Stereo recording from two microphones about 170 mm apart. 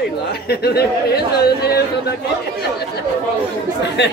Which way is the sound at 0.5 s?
70° left (ahead or behind).